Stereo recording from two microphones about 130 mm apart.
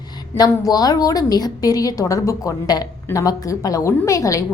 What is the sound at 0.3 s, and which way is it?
A woman's voice, 30° left (ahead or behind).